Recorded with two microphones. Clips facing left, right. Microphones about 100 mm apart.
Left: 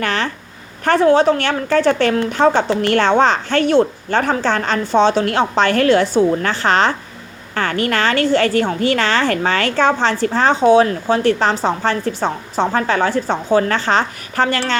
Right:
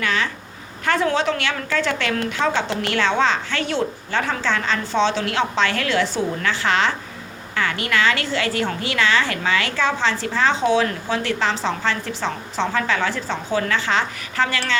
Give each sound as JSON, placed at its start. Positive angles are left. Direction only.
{"t": 0.0, "sound": "a woman's voice", "side_deg": 55}
{"t": 1.1, "sound": "a woman's voice", "side_deg": 45}